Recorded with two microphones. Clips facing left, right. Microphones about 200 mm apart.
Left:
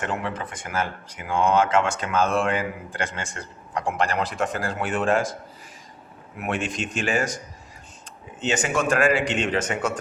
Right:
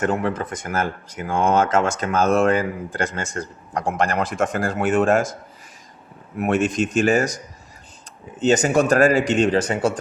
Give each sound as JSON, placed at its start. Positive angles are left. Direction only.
{"t": 0.0, "sound": "speech", "side_deg": -45}
{"t": 8.4, "sound": "speech", "side_deg": -40}